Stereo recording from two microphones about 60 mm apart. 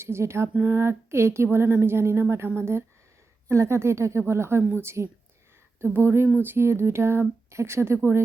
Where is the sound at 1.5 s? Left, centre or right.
Right.